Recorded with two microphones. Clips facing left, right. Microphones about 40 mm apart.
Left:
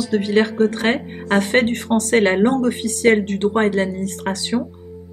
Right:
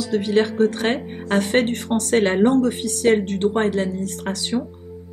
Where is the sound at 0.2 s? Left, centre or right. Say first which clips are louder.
Even; centre.